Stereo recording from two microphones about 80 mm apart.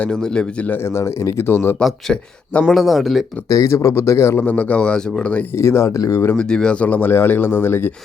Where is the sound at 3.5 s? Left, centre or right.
Left.